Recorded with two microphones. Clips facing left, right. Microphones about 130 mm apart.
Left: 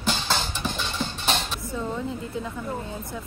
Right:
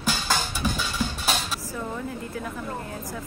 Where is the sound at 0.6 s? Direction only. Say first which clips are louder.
Right 2 dB; 5° right (ahead or behind).